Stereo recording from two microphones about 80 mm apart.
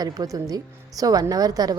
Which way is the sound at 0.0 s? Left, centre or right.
Right.